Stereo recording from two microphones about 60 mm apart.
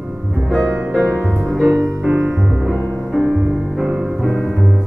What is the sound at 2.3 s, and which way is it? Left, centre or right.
Music, centre.